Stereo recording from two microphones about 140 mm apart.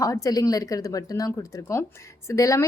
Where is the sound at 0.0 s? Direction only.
25° left (ahead or behind).